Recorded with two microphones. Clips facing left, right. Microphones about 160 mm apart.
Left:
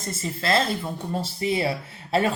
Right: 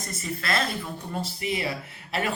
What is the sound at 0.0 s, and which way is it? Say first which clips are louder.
Speech: left 4 dB; 25° left (ahead or behind).